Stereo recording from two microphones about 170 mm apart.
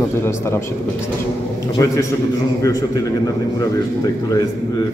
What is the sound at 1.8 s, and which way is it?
Speech, 20° left (ahead or behind).